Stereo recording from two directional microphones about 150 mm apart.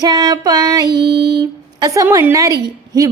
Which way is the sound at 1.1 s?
90° right.